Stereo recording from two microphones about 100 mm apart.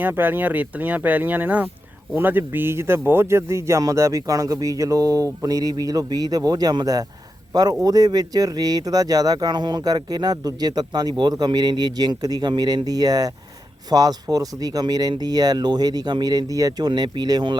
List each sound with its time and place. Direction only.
0.0 s speech: 20° right (ahead or behind); by 17.6 s 45° right (ahead or behind)